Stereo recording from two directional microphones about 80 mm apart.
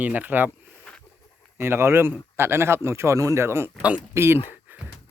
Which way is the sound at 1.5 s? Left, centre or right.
Right.